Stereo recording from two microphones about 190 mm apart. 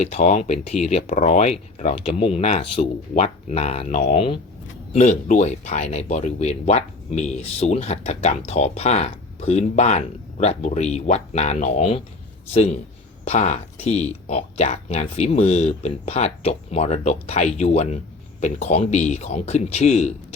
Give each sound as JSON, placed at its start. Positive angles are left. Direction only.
{"t": 0.0, "sound": "speech", "side_deg": 40}